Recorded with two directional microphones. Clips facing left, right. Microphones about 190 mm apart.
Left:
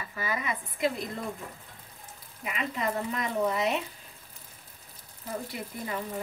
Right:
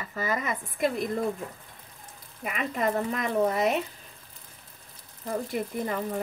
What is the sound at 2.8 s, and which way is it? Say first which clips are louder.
Speech: right 4 dB; 50° right (ahead or behind).